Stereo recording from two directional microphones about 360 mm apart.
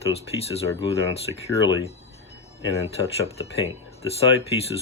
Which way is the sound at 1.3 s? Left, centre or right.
Centre.